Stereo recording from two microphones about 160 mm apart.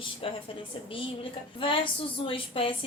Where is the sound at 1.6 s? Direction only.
30° left (ahead or behind).